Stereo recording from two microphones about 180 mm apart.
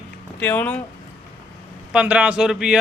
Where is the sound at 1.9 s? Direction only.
5° right (ahead or behind).